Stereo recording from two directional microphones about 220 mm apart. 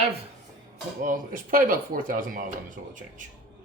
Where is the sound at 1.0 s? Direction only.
35° right (ahead or behind).